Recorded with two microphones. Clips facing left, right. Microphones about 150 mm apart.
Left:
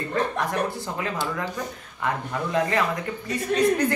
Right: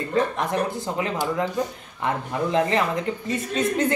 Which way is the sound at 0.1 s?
20° right (ahead or behind).